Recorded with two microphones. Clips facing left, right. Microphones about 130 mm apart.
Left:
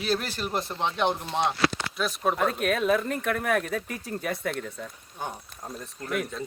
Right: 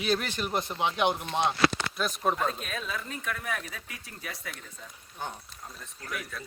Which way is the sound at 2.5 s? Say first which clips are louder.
Left 12 dB; 65° left (ahead or behind).